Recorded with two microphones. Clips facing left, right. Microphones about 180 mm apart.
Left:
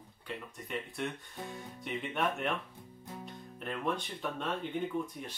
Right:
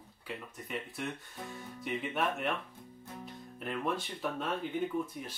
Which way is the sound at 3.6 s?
5° right (ahead or behind).